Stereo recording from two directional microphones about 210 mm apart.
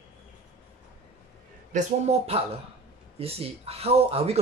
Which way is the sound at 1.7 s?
30° right (ahead or behind).